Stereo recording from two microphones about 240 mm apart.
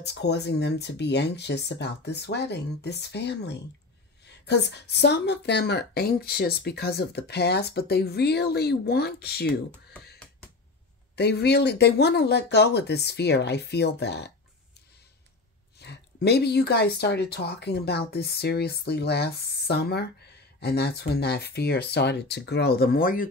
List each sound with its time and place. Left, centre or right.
0.0 s a woman's voice: left
11.1 s a woman's voice: left
15.8 s a woman's voice: left